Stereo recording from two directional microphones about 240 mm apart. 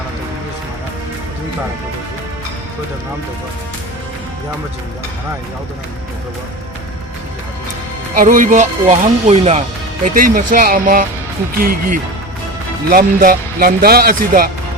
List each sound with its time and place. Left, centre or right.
8.1 s speech: right